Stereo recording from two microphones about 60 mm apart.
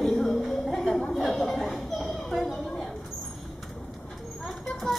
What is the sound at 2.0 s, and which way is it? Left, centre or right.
Children playing, centre.